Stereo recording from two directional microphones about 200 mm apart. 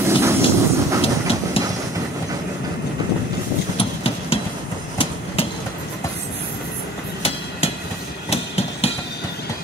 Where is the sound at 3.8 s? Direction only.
30° left (ahead or behind).